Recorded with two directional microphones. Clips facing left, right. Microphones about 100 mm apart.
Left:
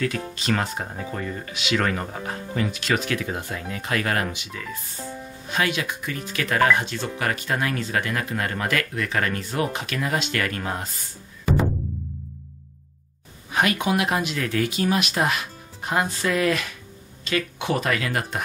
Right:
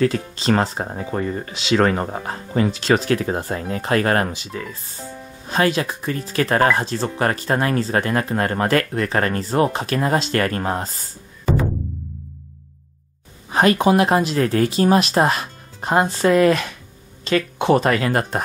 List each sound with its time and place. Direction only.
0.0 s speech: 30° right (ahead or behind)
13.5 s speech: 35° right (ahead or behind)